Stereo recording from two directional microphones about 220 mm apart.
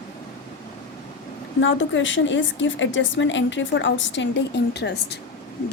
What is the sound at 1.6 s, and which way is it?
A woman's voice, 60° left (ahead or behind).